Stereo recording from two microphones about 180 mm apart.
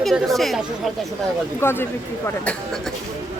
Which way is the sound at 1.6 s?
15° left (ahead or behind).